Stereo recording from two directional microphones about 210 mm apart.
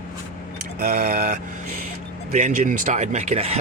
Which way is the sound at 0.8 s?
45° right (ahead or behind).